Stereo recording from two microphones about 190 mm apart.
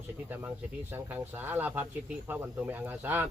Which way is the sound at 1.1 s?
10° right (ahead or behind).